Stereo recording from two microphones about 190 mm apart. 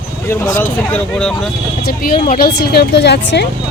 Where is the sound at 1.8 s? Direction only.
50° left (ahead or behind).